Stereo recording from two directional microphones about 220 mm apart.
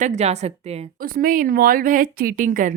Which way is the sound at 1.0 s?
40° right (ahead or behind).